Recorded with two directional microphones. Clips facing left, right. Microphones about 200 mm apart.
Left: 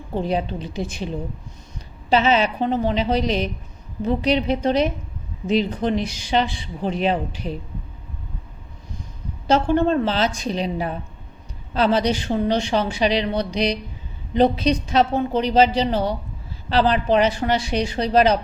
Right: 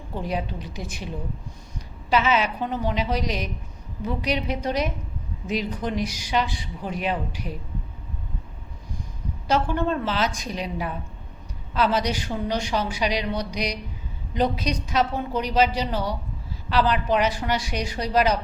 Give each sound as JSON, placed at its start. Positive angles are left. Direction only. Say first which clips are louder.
{"t": 0.1, "sound": "speech", "louder": "left 6 dB", "side_deg": 30}
{"t": 9.5, "sound": "speech", "louder": "left 6 dB", "side_deg": 30}